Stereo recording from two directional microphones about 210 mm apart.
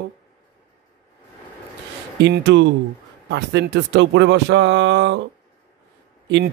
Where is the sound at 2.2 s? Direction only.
55° right (ahead or behind).